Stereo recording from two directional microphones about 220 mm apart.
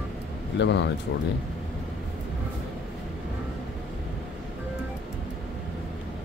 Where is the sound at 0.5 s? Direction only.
55° left (ahead or behind).